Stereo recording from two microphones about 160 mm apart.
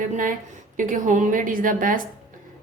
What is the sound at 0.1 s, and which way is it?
A woman's voice, 55° right (ahead or behind).